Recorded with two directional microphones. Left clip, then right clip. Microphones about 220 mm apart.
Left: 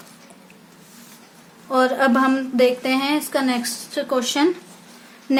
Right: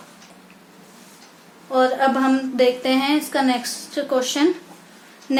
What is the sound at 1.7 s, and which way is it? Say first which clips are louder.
A woman's voice: even; 20° left (ahead or behind).